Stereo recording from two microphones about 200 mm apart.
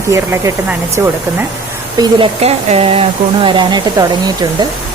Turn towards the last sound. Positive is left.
turn(degrees=-20)  # may be behind; listen again after turning